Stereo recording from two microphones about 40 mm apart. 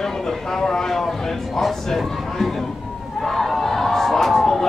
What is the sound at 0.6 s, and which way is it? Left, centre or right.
Speech, centre.